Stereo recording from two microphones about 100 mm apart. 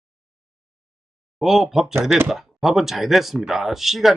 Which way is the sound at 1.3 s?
5° right (ahead or behind).